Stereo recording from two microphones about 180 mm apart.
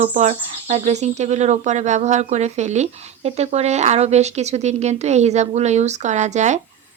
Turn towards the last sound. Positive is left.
turn(degrees=-40)  # may be behind; listen again after turning